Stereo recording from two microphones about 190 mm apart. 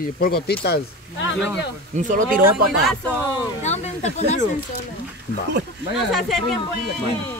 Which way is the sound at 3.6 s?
35° left (ahead or behind).